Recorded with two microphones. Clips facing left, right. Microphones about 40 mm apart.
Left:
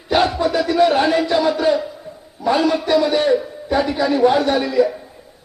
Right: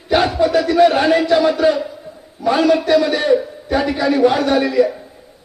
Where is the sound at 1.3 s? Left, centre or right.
Right.